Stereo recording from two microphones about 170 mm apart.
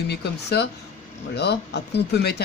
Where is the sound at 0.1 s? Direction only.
75° left (ahead or behind).